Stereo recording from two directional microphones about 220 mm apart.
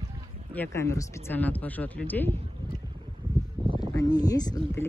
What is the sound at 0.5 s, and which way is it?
Speech, 10° left (ahead or behind).